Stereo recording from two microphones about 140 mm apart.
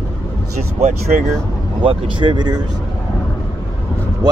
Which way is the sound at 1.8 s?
35° right (ahead or behind).